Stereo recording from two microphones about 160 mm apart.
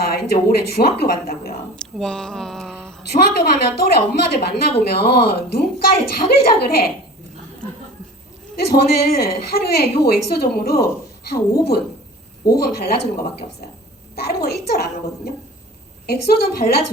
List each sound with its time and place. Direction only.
0.0 s a woman's voice: 80° left
1.7 s speech: 5° left (ahead or behind)
3.0 s a woman's voice: 85° left
8.5 s a woman's voice: 80° left
12.5 s a woman's voice: 85° left